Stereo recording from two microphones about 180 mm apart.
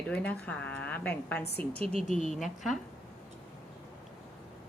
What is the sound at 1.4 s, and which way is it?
Speech, 65° left (ahead or behind).